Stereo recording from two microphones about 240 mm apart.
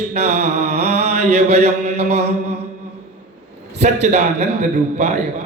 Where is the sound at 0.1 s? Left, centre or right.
Right.